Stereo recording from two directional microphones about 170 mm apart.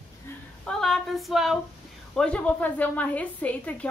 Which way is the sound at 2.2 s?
5° left (ahead or behind).